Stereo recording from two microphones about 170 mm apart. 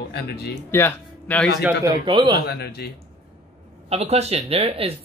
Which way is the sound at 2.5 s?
70° left (ahead or behind).